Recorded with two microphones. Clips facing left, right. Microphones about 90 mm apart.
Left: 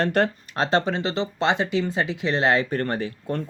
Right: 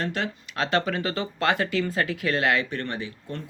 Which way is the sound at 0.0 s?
55° left (ahead or behind).